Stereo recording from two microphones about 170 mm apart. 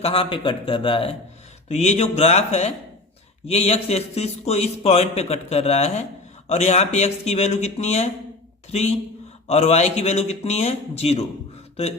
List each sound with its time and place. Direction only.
0.0 s a man's voice: 35° left (ahead or behind)
1.6 s a man's voice: 40° left (ahead or behind)